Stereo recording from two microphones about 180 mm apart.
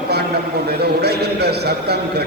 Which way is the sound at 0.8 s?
65° right (ahead or behind).